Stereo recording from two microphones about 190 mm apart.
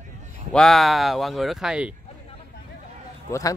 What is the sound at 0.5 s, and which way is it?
Speech, centre (ahead or behind).